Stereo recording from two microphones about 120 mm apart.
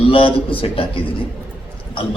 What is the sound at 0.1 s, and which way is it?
Speech, 45° left (ahead or behind).